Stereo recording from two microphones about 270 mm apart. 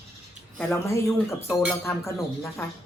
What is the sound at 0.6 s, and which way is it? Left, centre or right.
Speech, centre.